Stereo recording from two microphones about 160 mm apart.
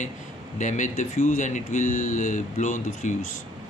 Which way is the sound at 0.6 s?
50° left (ahead or behind).